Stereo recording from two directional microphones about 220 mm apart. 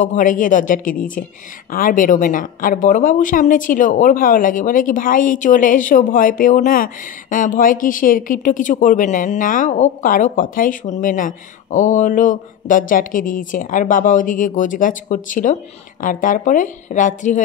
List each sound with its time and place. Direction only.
0.0 s a woman's voice: 35° left (ahead or behind)